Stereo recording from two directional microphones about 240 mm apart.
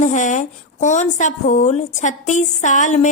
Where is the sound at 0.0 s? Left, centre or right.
Left.